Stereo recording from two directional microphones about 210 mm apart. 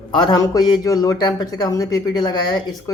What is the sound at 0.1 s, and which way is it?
A man's voice, 20° left (ahead or behind).